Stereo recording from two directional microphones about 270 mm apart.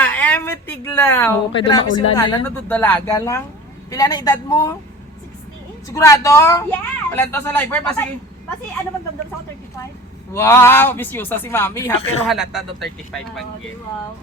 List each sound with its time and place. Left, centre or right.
0.0 s a sound: centre
1.5 s a woman's voice: centre
5.9 s a woman's voice: centre
10.3 s a woman's voice: centre
12.4 s speech: centre